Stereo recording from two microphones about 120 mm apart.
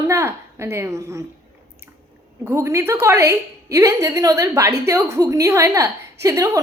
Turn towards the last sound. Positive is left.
turn(degrees=-25)  # may be behind; listen again after turning